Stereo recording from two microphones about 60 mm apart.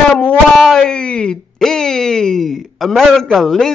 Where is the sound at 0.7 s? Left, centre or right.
Centre.